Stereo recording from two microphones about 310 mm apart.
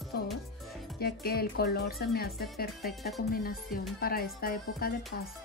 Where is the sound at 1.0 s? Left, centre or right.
Left.